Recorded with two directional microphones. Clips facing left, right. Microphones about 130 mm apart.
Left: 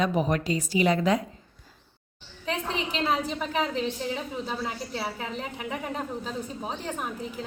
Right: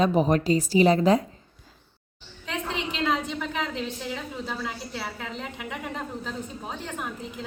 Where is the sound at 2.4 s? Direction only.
35° left (ahead or behind).